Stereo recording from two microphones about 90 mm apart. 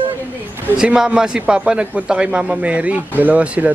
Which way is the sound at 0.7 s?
5° right (ahead or behind).